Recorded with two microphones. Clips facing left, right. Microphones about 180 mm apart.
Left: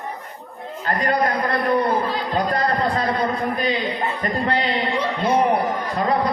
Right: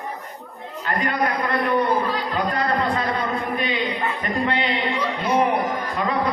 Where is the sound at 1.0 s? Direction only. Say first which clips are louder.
Left 3 dB; 40° left (ahead or behind).